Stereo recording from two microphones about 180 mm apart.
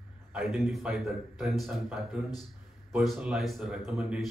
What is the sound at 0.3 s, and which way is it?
A man's voice, centre (ahead or behind).